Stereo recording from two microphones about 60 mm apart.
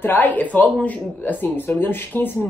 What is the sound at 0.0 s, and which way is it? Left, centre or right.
Speech, left.